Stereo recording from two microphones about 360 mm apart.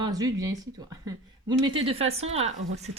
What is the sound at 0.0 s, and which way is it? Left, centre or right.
Speech, centre.